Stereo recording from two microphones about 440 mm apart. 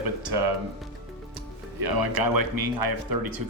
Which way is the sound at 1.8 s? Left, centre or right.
Right.